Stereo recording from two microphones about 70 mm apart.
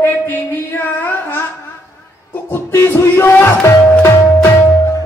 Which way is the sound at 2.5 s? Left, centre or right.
Left.